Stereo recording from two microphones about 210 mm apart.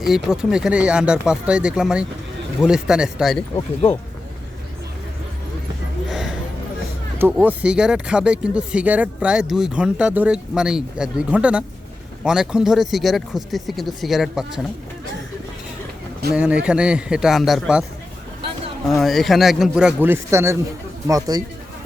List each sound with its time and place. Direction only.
0.0 s speech: centre (ahead or behind)
6.1 s a sound: centre (ahead or behind)
7.2 s speech: 10° right (ahead or behind)
16.3 s speech: 5° right (ahead or behind)
18.9 s speech: centre (ahead or behind); by 21.4 s 15° right (ahead or behind)